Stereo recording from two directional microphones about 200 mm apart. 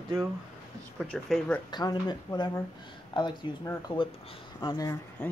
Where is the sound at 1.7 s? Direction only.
20° left (ahead or behind).